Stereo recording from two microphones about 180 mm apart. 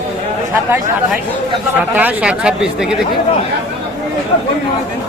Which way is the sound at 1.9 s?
10° right (ahead or behind).